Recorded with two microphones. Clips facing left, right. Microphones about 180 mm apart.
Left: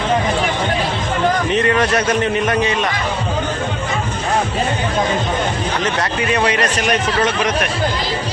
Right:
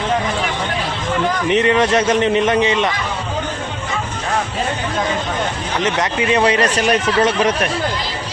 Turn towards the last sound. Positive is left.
turn(degrees=-30)  # may be behind; listen again after turning